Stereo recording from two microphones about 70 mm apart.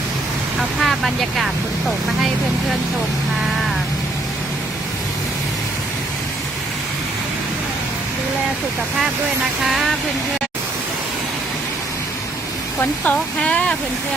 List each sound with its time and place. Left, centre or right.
0.8 s speech: centre
9.6 s speech: centre
13.1 s speech: centre